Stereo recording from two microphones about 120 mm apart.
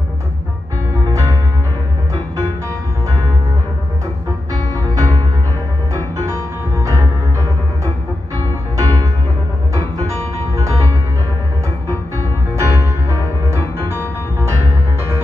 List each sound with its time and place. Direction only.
4.7 s music: 30° right (ahead or behind)
8.7 s music: 25° right (ahead or behind)
12.2 s music: 25° right (ahead or behind)